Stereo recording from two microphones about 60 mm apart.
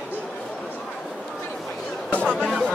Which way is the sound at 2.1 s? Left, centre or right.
Centre.